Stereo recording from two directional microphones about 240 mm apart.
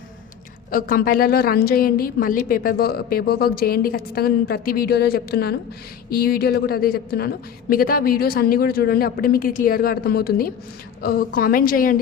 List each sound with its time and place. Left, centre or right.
0.7 s a woman's voice: left